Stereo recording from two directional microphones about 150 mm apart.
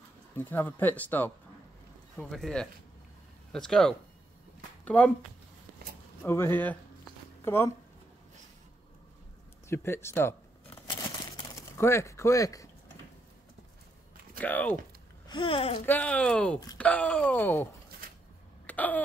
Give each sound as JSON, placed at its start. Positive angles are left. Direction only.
{"t": 0.4, "sound": "speech", "side_deg": 10}
{"t": 2.1, "sound": "speech", "side_deg": 0}
{"t": 6.2, "sound": "speech", "side_deg": 15}
{"t": 9.7, "sound": "speech", "side_deg": 15}
{"t": 11.7, "sound": "speech", "side_deg": 15}
{"t": 14.4, "sound": "speech", "side_deg": 10}
{"t": 15.2, "sound": "speech", "side_deg": 35}
{"t": 15.8, "sound": "speech", "side_deg": 10}
{"t": 18.7, "sound": "a sound", "side_deg": 10}